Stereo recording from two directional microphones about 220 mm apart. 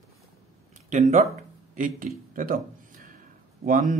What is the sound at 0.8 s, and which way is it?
Speech, 35° right (ahead or behind).